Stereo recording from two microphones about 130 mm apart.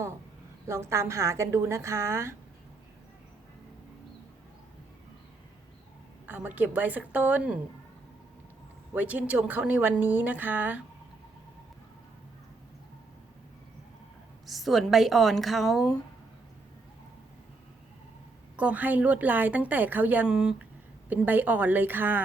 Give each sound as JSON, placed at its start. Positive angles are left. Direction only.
{"t": 0.7, "sound": "a woman's voice", "side_deg": -20}
{"t": 6.2, "sound": "a woman's voice", "side_deg": -15}
{"t": 9.0, "sound": "a woman's voice", "side_deg": -10}
{"t": 14.4, "sound": "a woman's voice", "side_deg": 0}
{"t": 18.5, "sound": "a woman's voice", "side_deg": -10}